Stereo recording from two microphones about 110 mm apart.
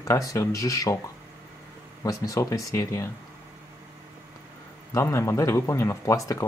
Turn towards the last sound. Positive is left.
turn(degrees=30)  # may be behind; listen again after turning